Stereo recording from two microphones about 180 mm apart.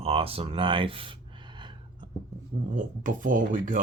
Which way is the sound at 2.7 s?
45° right (ahead or behind).